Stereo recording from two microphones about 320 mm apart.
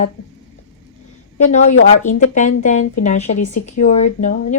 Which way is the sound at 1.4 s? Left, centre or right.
Left.